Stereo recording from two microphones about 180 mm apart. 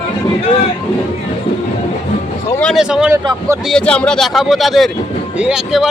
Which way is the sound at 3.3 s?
15° right (ahead or behind).